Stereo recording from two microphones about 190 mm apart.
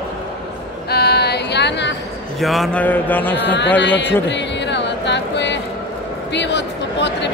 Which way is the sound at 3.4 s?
65° left (ahead or behind).